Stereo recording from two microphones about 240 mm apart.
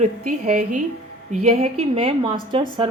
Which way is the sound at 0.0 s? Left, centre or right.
Right.